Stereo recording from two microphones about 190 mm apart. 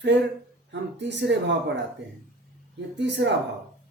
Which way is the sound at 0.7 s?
65° right (ahead or behind).